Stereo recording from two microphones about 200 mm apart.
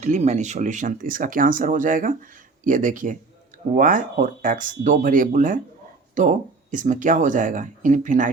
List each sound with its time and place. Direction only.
0.0 s speech: 35° right (ahead or behind)